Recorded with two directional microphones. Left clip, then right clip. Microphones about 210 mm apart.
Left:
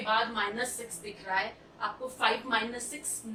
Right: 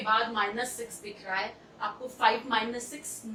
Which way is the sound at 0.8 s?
20° right (ahead or behind).